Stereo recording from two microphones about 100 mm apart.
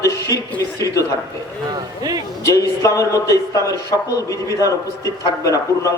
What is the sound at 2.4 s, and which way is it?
A man's voice, 30° left (ahead or behind).